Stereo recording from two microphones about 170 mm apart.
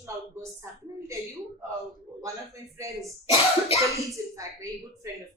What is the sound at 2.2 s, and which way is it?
A woman's voice, 20° right (ahead or behind).